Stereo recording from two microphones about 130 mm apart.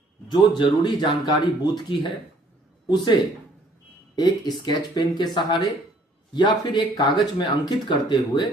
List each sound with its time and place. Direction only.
0.3 s speech: 35° left (ahead or behind)